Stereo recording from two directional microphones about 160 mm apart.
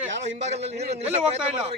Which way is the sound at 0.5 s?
40° right (ahead or behind).